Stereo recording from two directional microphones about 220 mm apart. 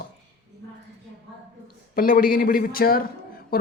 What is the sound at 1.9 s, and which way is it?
A woman's voice, 40° left (ahead or behind).